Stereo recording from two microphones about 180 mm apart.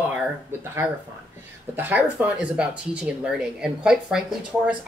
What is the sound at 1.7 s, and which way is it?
Speech, 10° right (ahead or behind).